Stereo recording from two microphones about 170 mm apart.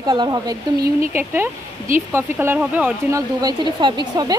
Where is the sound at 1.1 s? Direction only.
10° right (ahead or behind).